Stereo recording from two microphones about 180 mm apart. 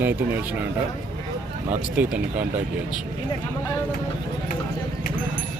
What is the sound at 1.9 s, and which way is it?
Speech, 10° right (ahead or behind).